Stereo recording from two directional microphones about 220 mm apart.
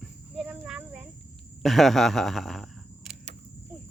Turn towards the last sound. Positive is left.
turn(degrees=0)  # may be behind; listen again after turning